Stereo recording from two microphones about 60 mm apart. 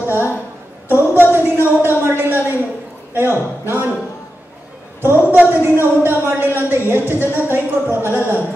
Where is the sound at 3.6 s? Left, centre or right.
Right.